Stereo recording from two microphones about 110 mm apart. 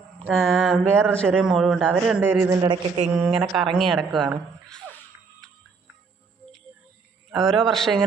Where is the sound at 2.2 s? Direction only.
25° right (ahead or behind).